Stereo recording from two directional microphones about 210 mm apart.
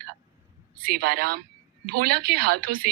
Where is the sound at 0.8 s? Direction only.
45° right (ahead or behind).